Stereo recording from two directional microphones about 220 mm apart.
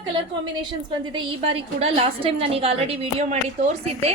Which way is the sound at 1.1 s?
25° right (ahead or behind).